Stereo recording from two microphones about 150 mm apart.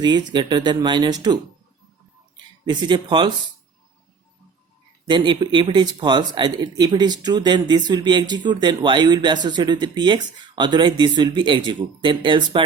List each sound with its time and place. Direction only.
0.0 s speech: 30° right (ahead or behind)
2.6 s speech: 30° right (ahead or behind)
5.0 s speech: 30° right (ahead or behind)